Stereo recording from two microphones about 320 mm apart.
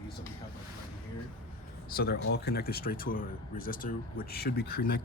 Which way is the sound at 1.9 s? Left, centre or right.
Left.